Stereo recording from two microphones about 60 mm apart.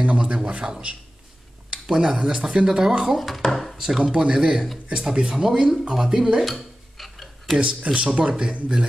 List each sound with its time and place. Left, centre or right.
0.0 s speech: centre
7.6 s speech: centre